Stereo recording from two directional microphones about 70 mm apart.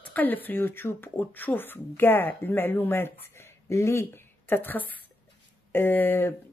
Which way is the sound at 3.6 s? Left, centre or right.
Left.